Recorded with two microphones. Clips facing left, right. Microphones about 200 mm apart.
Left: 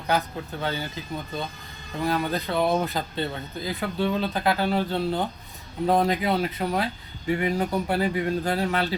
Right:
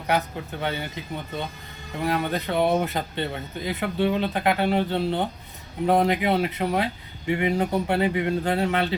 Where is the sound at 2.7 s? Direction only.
70° right (ahead or behind).